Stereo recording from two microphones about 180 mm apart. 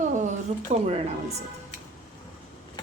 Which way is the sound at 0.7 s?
45° right (ahead or behind).